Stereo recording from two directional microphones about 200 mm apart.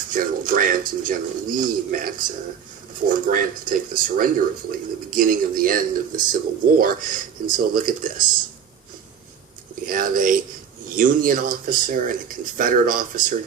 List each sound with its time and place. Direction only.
0.1 s speech: 45° right (ahead or behind)
9.8 s speech: 45° right (ahead or behind)